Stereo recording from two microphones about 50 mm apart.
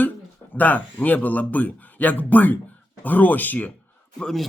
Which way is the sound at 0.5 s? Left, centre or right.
Left.